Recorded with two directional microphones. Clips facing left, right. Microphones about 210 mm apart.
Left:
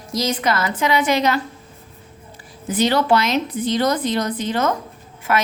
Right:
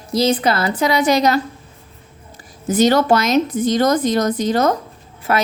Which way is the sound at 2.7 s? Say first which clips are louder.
Right 4 dB; 45° right (ahead or behind).